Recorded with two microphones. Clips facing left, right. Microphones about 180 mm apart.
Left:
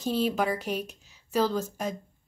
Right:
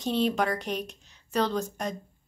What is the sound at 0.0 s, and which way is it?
A woman's voice, 5° left (ahead or behind).